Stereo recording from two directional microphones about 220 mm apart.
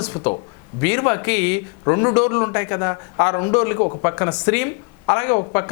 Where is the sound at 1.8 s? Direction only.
20° left (ahead or behind).